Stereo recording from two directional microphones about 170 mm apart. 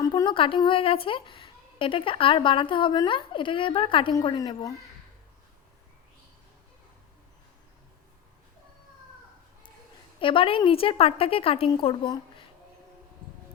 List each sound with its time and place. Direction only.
0.0 s a woman's voice: 25° left (ahead or behind)
10.2 s a woman's voice: 30° left (ahead or behind)